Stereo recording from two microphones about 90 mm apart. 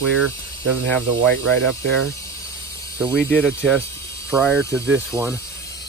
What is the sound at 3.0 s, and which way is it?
Speech, 5° right (ahead or behind).